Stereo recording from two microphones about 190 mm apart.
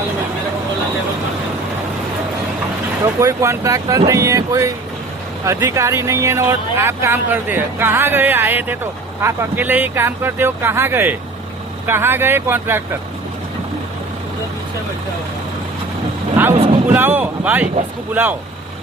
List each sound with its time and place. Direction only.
3.0 s speech: 15° right (ahead or behind)
16.9 s speech: 10° right (ahead or behind)